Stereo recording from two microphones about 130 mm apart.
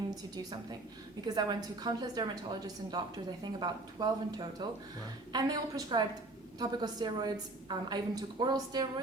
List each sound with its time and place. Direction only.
0.1 s a woman's voice: 30° right (ahead or behind)